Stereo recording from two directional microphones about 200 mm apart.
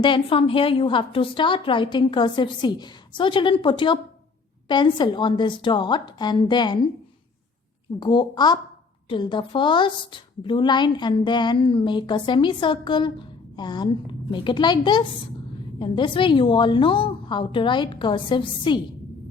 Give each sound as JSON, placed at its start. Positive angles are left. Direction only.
{"t": 0.0, "sound": "a woman's voice", "side_deg": 25}
{"t": 7.9, "sound": "a woman's voice", "side_deg": 25}